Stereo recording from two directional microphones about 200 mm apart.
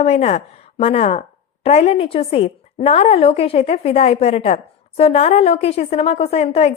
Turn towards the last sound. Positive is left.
turn(degrees=30)  # may be behind; listen again after turning